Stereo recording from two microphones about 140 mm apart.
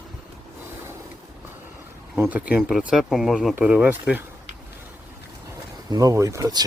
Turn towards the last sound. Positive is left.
turn(degrees=-25)  # may be behind; listen again after turning